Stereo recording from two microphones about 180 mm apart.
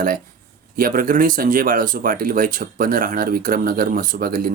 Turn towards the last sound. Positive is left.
turn(degrees=-50)  # may be behind; listen again after turning